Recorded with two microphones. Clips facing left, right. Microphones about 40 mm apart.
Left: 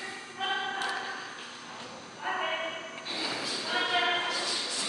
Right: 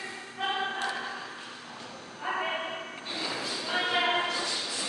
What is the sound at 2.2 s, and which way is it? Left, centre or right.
Bow-wow, centre.